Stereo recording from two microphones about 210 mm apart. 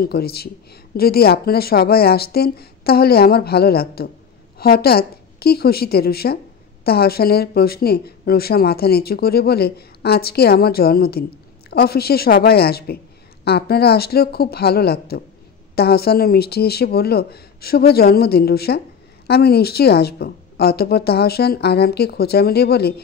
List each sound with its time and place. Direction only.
0.0 s a woman's voice: 50° left (ahead or behind)